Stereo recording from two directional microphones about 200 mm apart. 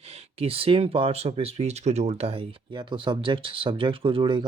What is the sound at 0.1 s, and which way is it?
Speech, 30° right (ahead or behind).